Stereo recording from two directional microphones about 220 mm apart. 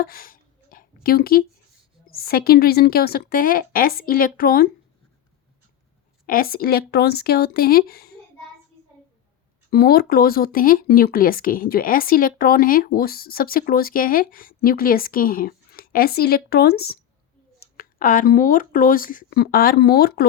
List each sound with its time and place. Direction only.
0.0 s a sound: 40° left (ahead or behind)
1.0 s a woman's voice: 45° left (ahead or behind)
6.2 s a woman's voice: 40° left (ahead or behind)
9.6 s speech: 45° left (ahead or behind)